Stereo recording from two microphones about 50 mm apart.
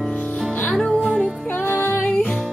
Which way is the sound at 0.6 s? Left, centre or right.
Centre.